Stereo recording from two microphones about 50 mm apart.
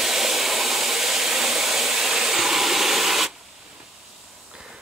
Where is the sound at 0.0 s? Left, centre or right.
Centre.